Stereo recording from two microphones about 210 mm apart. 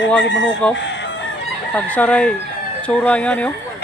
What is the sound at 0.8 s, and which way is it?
Chicken, 55° left (ahead or behind).